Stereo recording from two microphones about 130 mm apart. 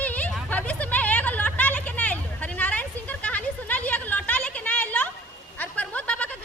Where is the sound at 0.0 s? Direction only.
15° left (ahead or behind).